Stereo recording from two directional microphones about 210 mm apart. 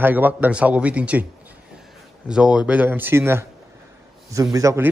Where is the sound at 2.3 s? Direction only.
5° right (ahead or behind).